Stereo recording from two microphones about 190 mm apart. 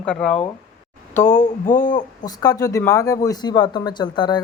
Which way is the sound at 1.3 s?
40° left (ahead or behind).